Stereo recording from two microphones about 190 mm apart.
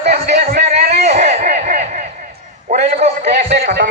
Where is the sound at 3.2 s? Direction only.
60° right (ahead or behind).